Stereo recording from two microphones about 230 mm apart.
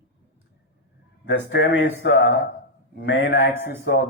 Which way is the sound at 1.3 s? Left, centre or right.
Left.